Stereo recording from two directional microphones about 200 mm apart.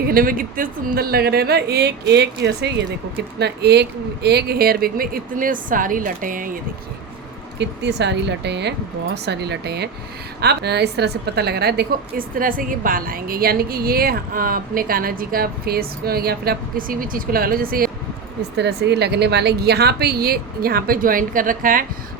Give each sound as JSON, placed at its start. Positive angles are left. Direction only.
{"t": 0.0, "sound": "a woman's voice", "side_deg": -45}
{"t": 7.6, "sound": "a woman's voice", "side_deg": -60}
{"t": 18.5, "sound": "a woman's voice", "side_deg": -55}